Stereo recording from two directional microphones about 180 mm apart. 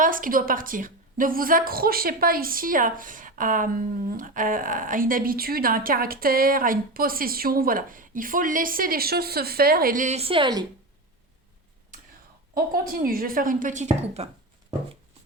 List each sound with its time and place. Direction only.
0.0 s a woman's voice: 50° right (ahead or behind); by 10.7 s 25° right (ahead or behind)
12.5 s a woman's voice: 55° right (ahead or behind); by 14.3 s 35° right (ahead or behind)